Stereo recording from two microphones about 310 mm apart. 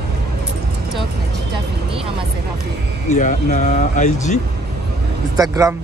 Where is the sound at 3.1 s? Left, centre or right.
Left.